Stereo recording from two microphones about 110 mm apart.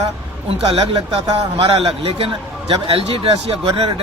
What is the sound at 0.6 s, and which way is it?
Speech, 55° right (ahead or behind).